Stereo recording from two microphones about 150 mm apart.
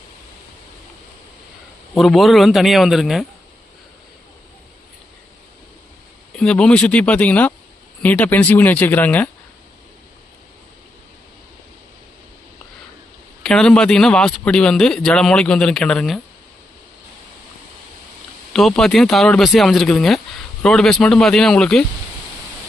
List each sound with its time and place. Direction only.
2.0 s a man's voice: centre (ahead or behind)
6.3 s speech: 5° left (ahead or behind)
13.4 s a man's voice: 5° left (ahead or behind)
18.5 s a man's voice: centre (ahead or behind)